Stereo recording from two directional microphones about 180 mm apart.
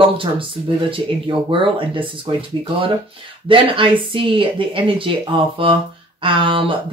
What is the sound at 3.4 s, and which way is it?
Speech, 30° right (ahead or behind).